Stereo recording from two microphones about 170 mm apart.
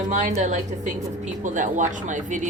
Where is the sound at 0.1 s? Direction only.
45° right (ahead or behind).